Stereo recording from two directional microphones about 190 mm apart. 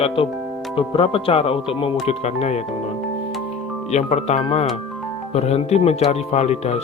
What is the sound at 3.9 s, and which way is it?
Speech, 35° left (ahead or behind).